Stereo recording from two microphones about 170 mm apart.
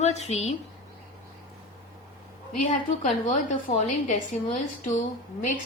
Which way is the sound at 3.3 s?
45° left (ahead or behind).